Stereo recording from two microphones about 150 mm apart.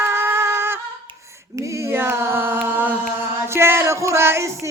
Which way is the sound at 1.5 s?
20° right (ahead or behind).